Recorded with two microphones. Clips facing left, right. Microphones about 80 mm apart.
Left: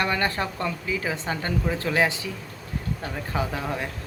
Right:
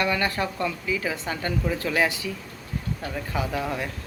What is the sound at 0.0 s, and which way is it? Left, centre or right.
Speech, left.